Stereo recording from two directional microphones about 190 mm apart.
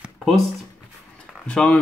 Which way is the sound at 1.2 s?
5° left (ahead or behind).